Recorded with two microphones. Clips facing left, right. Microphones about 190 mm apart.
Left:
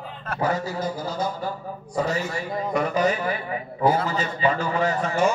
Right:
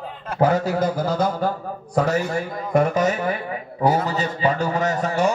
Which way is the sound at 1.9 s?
50° right (ahead or behind).